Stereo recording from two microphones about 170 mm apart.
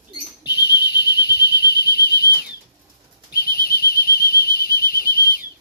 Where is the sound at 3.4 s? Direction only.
65° left (ahead or behind).